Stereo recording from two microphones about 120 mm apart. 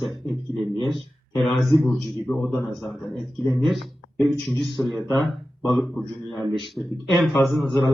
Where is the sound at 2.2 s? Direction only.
20° left (ahead or behind).